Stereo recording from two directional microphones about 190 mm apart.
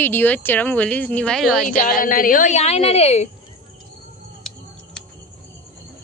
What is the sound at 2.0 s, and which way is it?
A woman's voice, 45° left (ahead or behind).